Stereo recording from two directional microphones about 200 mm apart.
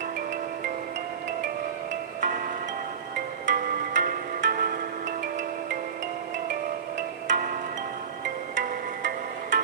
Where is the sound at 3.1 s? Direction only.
50° right (ahead or behind).